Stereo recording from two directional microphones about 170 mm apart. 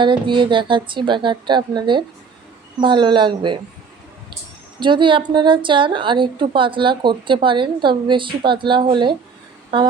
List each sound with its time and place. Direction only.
0.0 s a woman's voice: 30° right (ahead or behind)
4.8 s a woman's voice: 30° right (ahead or behind)